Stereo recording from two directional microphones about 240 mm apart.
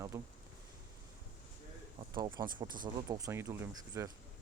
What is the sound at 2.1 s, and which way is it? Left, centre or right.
Speech, centre.